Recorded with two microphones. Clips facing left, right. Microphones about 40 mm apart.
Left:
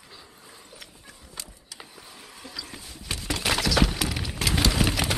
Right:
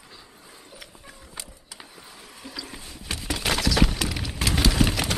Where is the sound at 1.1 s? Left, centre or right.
Centre.